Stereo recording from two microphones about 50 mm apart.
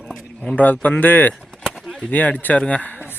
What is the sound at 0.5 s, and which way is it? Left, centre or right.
Speech, left.